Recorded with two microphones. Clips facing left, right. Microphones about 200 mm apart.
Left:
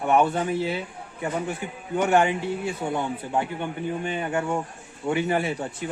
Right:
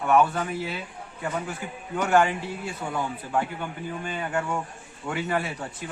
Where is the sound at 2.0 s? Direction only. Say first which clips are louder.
Left 1 dB; 20° left (ahead or behind).